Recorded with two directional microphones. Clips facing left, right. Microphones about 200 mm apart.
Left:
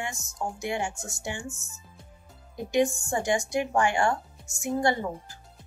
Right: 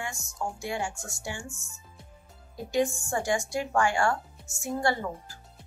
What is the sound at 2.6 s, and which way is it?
Speech, 20° left (ahead or behind).